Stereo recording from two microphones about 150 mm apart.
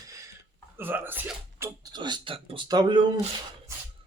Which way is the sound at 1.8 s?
30° right (ahead or behind).